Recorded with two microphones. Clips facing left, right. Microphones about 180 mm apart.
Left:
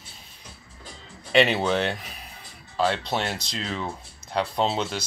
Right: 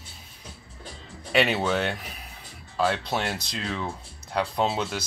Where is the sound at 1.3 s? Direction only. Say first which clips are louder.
Left 2 dB; 5° right (ahead or behind).